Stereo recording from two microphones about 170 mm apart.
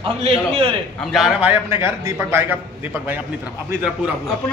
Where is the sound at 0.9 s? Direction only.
Centre (ahead or behind).